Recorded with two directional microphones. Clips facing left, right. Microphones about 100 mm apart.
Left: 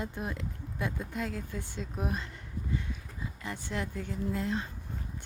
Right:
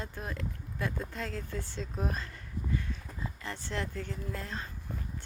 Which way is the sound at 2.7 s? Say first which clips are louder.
Even; 15° left (ahead or behind).